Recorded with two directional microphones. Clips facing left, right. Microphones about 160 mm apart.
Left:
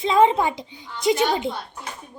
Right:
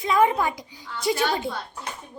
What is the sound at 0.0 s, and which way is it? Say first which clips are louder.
A child's voice: left 3 dB; 25° left (ahead or behind).